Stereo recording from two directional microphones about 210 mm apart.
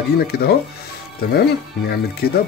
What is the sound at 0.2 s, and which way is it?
Speech, 50° left (ahead or behind).